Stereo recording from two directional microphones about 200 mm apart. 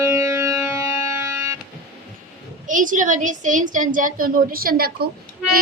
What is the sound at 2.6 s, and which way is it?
A woman's voice, 40° right (ahead or behind).